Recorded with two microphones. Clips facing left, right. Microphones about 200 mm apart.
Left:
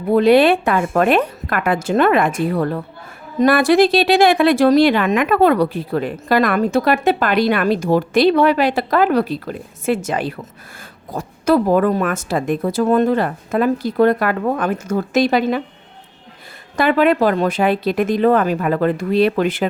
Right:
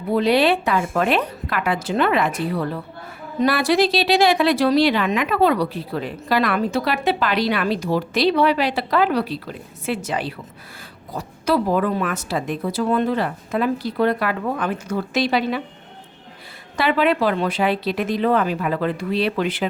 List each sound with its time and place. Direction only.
0.1 s speech: 50° left (ahead or behind)
16.7 s speech: 45° left (ahead or behind)